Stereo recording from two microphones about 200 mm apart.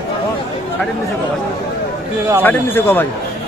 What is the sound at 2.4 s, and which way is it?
Speech, 10° left (ahead or behind).